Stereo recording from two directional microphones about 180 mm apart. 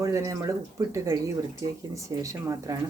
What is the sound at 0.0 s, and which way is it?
Speech, 15° right (ahead or behind).